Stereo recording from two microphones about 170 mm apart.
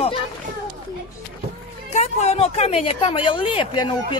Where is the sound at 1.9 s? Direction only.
40° left (ahead or behind).